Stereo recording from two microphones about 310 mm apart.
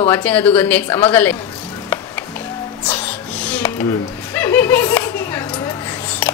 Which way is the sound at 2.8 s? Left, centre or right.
Centre.